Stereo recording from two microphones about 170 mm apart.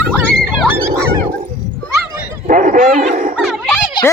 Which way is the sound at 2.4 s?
50° right (ahead or behind).